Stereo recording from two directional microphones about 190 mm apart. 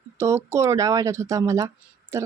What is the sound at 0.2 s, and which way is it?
Speech, 15° right (ahead or behind).